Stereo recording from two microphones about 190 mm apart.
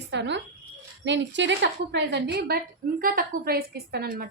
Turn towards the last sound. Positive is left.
turn(degrees=-55)  # may be behind; listen again after turning